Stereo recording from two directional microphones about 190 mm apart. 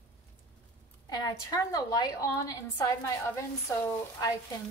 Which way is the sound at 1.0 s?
20° left (ahead or behind).